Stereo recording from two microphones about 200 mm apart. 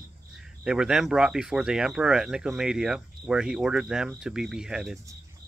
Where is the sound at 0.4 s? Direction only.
5° right (ahead or behind).